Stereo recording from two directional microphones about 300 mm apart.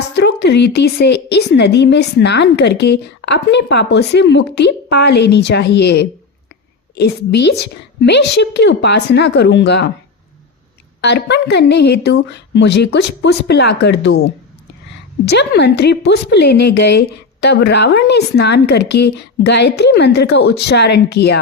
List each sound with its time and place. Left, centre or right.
0.2 s a woman's voice: left
11.0 s a woman's voice: left